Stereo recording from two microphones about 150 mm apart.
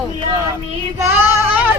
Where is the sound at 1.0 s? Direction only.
15° right (ahead or behind).